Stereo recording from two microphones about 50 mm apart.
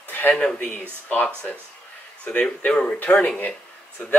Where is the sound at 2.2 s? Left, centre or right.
Left.